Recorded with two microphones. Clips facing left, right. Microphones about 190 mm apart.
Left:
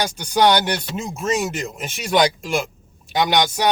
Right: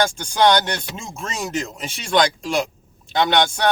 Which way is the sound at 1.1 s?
Centre (ahead or behind).